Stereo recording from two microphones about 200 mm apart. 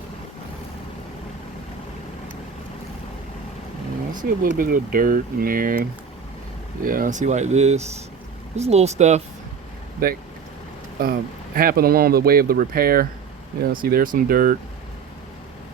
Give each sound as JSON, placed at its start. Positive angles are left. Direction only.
{"t": 4.2, "sound": "speech", "side_deg": -45}
{"t": 6.8, "sound": "speech", "side_deg": -45}
{"t": 10.0, "sound": "speech", "side_deg": -45}